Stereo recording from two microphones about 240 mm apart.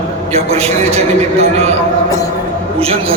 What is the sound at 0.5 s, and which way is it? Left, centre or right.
A man's voice, right.